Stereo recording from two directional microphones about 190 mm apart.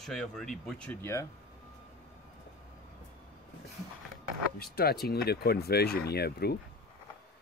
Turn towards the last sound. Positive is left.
turn(degrees=55)  # may be behind; listen again after turning